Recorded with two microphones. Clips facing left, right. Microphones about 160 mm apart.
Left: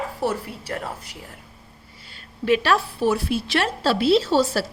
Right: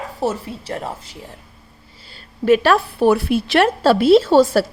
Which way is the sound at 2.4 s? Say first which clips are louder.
Right 6 dB; 50° right (ahead or behind).